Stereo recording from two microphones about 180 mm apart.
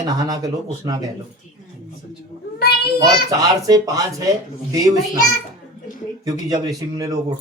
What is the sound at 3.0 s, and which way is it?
Speech, 20° right (ahead or behind).